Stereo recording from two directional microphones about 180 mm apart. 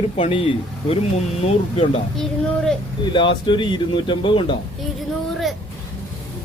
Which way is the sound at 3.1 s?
25° left (ahead or behind).